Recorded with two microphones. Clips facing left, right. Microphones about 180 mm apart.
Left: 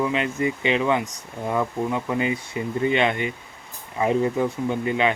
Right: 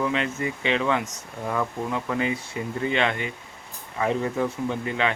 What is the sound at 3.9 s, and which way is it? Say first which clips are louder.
Speech: left 4 dB; 15° left (ahead or behind).